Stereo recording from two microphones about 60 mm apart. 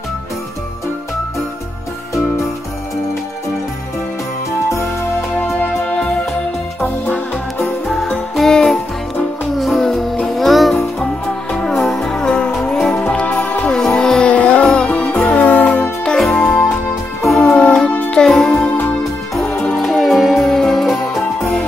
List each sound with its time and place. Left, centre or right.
8.4 s music: centre
12.9 s music: left
13.7 s music: centre
14.3 s music: left
19.8 s music: centre